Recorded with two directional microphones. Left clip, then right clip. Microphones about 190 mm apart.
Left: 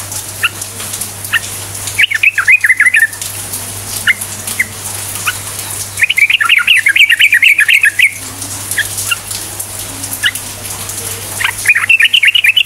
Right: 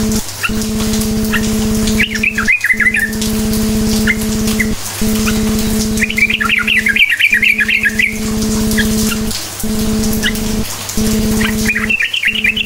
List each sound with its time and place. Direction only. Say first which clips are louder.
2.0 s bird: left 7 dB; 30° left (ahead or behind)
5.9 s bird: left 5 dB; 25° left (ahead or behind)
11.4 s bird: left 9 dB; 30° left (ahead or behind)